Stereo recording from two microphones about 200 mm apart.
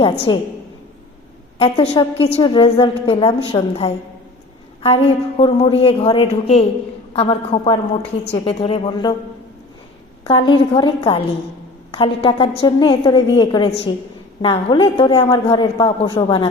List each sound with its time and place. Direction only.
0.3 s a man's voice: 20° left (ahead or behind)
1.5 s a man's voice: 30° left (ahead or behind)
10.2 s a man's voice: 25° left (ahead or behind)